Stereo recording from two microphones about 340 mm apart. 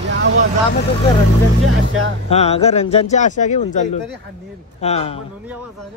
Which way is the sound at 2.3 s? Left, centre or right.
Centre.